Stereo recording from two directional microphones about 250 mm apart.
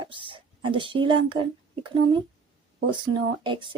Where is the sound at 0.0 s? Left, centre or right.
Centre.